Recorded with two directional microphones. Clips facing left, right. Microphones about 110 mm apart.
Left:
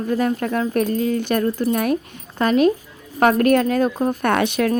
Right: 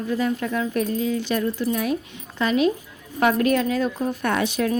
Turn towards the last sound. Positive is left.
turn(degrees=60)  # may be behind; listen again after turning